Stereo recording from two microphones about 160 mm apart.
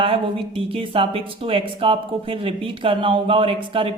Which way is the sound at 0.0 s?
35° right (ahead or behind).